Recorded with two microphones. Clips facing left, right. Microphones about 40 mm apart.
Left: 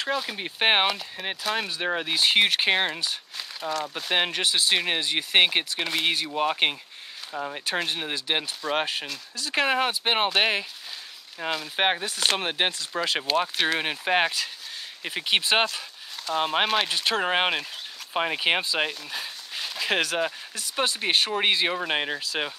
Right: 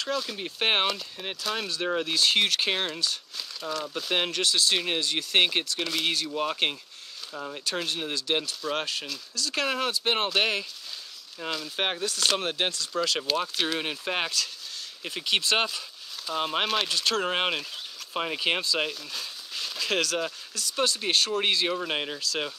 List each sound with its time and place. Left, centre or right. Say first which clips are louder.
0.0 s speech: left 2 dB; left